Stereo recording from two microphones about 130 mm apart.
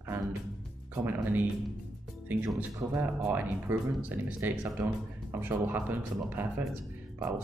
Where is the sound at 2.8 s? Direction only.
25° right (ahead or behind).